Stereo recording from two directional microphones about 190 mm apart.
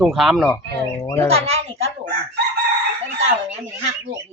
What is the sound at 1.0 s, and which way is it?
Speech, 15° left (ahead or behind).